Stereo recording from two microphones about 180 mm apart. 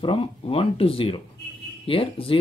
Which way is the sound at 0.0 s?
30° left (ahead or behind).